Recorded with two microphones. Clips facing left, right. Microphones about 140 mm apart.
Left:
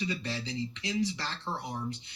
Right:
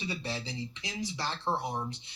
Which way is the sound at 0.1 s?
30° right (ahead or behind).